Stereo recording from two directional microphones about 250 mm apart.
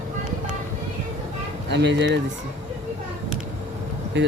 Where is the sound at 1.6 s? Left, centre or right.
Right.